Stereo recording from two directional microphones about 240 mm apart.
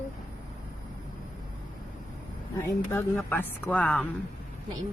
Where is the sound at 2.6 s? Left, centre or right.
Centre.